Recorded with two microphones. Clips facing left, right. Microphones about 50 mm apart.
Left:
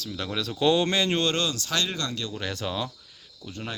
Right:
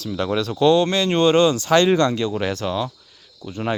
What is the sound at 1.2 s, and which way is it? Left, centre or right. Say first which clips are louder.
Speech: right 11 dB; right.